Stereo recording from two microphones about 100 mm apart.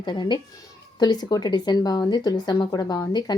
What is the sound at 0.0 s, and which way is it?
Speech, 50° left (ahead or behind).